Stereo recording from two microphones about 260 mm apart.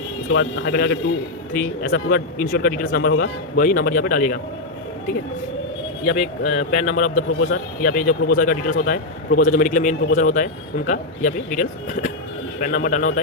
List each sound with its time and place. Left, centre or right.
0.3 s a man's voice: left
6.1 s a man's voice: left